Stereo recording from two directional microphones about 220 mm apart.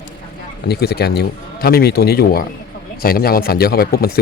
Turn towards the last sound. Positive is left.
turn(degrees=45)  # may be behind; listen again after turning